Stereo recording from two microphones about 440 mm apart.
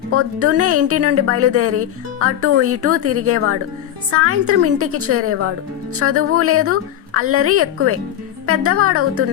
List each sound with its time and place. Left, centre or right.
0.1 s speech: right